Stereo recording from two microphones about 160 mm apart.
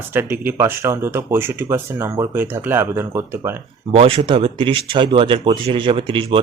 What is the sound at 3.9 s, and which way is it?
Speech, 35° right (ahead or behind).